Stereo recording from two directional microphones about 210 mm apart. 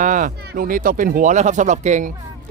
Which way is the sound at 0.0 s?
40° right (ahead or behind).